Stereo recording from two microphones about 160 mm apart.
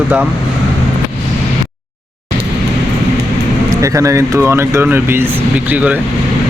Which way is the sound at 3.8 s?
20° right (ahead or behind).